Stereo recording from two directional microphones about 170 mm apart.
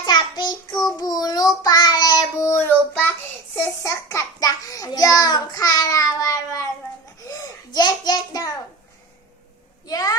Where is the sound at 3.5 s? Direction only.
15° left (ahead or behind).